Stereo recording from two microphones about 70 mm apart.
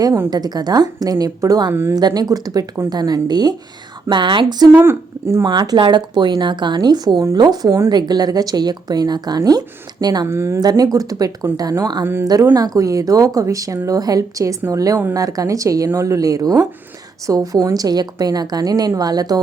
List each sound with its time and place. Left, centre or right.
0.3 s speech: right
4.1 s speech: right
4.8 s speech: right
5.4 s speech: right
7.3 s speech: right
7.9 s speech: right
10.2 s speech: right
10.6 s a woman's voice: right
11.8 s a woman's voice: right
12.2 s a woman's voice: right
17.7 s speech: right